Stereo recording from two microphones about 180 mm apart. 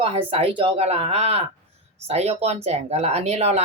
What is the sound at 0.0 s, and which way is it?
Speech, 30° right (ahead or behind).